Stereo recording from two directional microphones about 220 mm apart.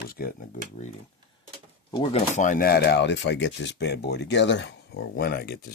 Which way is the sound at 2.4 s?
35° left (ahead or behind).